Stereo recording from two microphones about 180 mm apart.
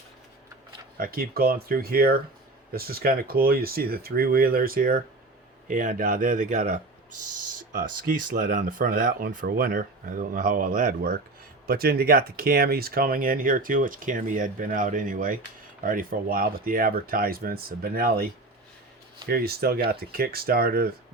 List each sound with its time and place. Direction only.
0.9 s speech: 55° right (ahead or behind)